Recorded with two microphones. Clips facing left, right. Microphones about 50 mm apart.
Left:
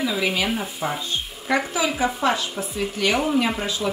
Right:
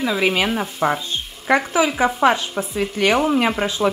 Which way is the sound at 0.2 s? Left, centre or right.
Right.